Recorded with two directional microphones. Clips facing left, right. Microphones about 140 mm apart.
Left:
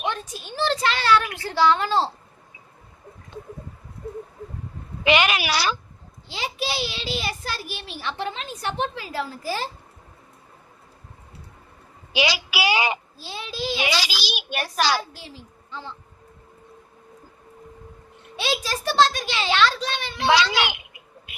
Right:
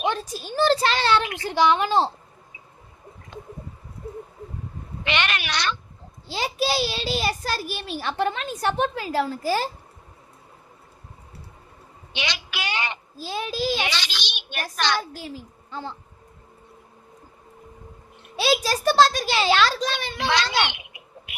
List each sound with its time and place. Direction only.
0.1 s a child's voice: 35° right (ahead or behind); by 2.0 s 15° right (ahead or behind)
5.0 s a child's voice: 5° left (ahead or behind)
6.2 s a child's voice: 40° right (ahead or behind)
12.1 s a woman's voice: 5° left (ahead or behind)
13.1 s a child's voice: 45° right (ahead or behind)
13.8 s a child's voice: 5° left (ahead or behind)
18.3 s a child's voice: 35° right (ahead or behind)
20.7 s a sound: 75° right (ahead or behind)